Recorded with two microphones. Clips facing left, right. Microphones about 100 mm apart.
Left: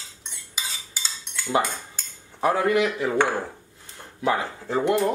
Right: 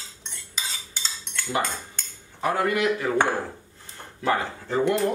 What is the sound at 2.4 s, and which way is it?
Speech, 25° left (ahead or behind).